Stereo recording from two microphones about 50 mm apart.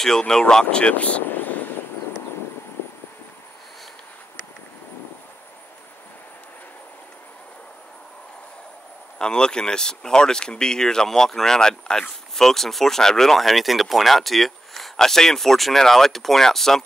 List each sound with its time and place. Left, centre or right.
0.0 s speech: centre; by 1.2 s left
1.2 s vehicle: left
9.2 s speech: centre